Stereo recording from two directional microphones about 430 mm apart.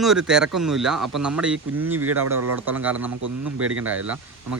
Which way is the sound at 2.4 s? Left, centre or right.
Right.